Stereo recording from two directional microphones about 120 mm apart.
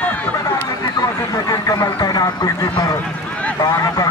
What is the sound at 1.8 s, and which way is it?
Speech, 35° left (ahead or behind).